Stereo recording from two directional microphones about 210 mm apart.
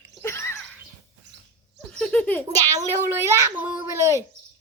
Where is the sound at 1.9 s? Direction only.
5° left (ahead or behind).